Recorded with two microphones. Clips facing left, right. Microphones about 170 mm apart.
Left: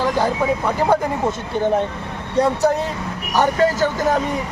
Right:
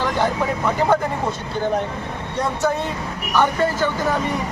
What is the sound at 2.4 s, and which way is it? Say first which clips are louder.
Speech: left 5 dB; 35° left (ahead or behind).